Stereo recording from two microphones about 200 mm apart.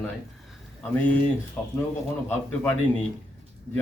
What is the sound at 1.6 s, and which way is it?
Speech, 10° left (ahead or behind).